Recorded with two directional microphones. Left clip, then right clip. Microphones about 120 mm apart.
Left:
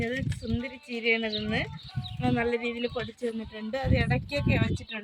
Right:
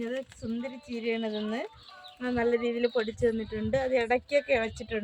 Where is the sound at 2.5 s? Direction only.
75° right (ahead or behind).